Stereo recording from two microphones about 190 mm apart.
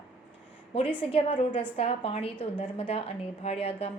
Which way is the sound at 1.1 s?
25° left (ahead or behind).